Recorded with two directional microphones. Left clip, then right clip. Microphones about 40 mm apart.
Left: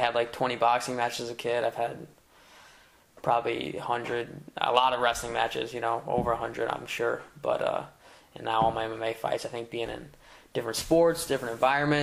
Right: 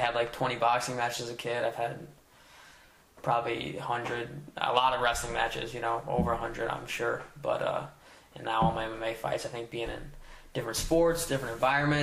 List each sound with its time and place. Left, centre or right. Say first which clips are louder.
0.0 s a man's voice: left 2 dB; left
3.2 s a man's voice: left 3 dB; left
6.0 s speech: left 2 dB; left
6.7 s a man's voice: left 2 dB; left